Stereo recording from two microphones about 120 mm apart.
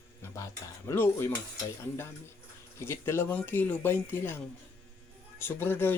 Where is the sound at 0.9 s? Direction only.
20° left (ahead or behind).